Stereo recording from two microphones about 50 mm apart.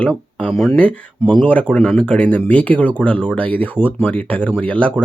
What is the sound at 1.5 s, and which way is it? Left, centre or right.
Speech, left.